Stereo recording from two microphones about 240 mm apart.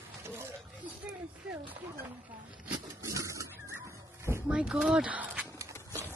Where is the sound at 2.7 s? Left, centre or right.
Centre.